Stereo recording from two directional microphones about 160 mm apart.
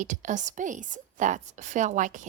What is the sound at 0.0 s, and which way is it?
A woman's voice, 50° right (ahead or behind).